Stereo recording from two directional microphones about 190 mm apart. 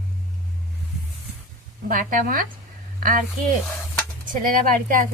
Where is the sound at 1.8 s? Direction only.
45° right (ahead or behind).